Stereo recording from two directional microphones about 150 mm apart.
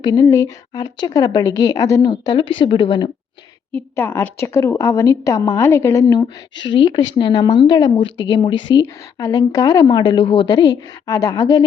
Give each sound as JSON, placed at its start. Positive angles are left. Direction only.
{"t": 0.0, "sound": "a woman's voice", "side_deg": 25}
{"t": 3.7, "sound": "a woman's voice", "side_deg": 15}